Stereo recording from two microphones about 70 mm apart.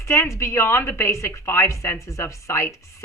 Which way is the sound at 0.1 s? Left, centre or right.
Left.